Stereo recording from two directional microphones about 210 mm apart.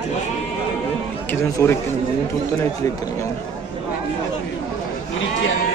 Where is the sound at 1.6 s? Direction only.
10° left (ahead or behind).